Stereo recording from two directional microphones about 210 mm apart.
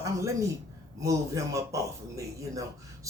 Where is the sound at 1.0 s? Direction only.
15° right (ahead or behind).